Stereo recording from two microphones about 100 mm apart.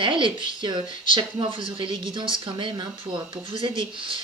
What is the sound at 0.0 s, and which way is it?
Speech, 55° right (ahead or behind).